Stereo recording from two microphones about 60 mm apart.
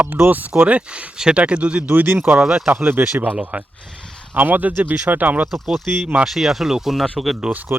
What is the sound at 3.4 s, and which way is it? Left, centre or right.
Speech, right.